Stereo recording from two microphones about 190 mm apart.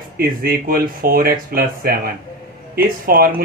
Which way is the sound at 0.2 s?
50° right (ahead or behind).